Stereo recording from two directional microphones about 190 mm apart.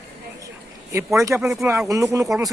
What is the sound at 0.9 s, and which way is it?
Speech, 15° right (ahead or behind).